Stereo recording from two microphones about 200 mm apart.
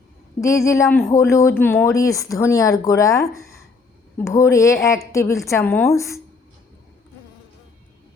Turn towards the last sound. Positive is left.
turn(degrees=15)  # may be behind; listen again after turning